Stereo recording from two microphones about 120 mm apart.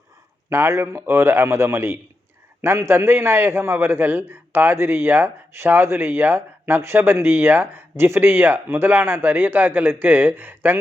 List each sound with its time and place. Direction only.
0.5 s a man's voice: 20° right (ahead or behind)